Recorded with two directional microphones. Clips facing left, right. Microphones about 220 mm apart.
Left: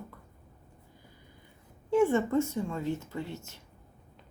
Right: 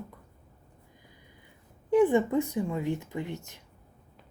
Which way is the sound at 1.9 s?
15° right (ahead or behind).